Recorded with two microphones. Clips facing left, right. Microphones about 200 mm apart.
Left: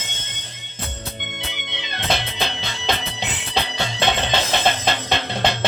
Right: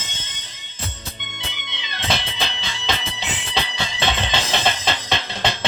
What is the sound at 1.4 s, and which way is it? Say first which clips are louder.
Music: left 3 dB; 55° left (ahead or behind).